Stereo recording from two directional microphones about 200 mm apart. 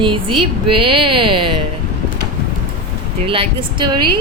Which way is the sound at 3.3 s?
25° right (ahead or behind).